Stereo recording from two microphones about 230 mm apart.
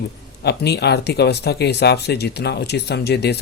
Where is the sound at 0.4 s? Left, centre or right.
Left.